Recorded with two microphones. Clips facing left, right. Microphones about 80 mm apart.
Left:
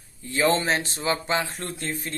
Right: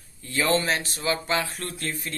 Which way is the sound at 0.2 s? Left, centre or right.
Left.